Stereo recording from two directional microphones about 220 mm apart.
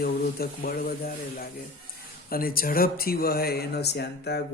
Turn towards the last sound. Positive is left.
turn(degrees=45)  # may be behind; listen again after turning